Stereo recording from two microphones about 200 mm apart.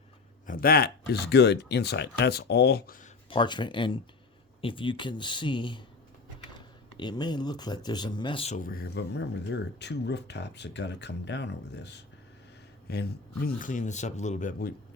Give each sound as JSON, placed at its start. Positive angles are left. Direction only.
{"t": 0.4, "sound": "speech", "side_deg": 45}
{"t": 3.2, "sound": "speech", "side_deg": 25}
{"t": 6.9, "sound": "speech", "side_deg": 20}
{"t": 8.5, "sound": "speech", "side_deg": 45}